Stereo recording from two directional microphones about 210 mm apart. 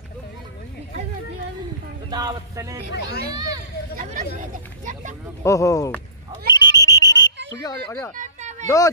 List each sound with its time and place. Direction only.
2.0 s speech: 20° right (ahead or behind)
3.9 s hubbub: 40° right (ahead or behind)
4.4 s speech: 35° right (ahead or behind)
5.4 s speech: 15° left (ahead or behind)
6.5 s whistle: 20° left (ahead or behind)
7.6 s speech: 15° left (ahead or behind)
8.2 s a sound: 35° right (ahead or behind)
8.6 s speech: 15° left (ahead or behind)